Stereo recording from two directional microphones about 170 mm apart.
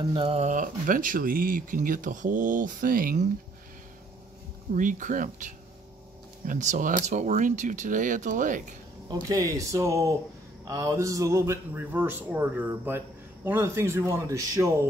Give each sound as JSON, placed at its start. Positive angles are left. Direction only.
{"t": 0.0, "sound": "speech", "side_deg": -30}
{"t": 4.7, "sound": "speech", "side_deg": -50}
{"t": 9.1, "sound": "speech", "side_deg": -20}